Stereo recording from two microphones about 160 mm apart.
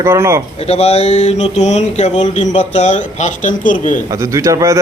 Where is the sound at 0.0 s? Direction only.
15° right (ahead or behind).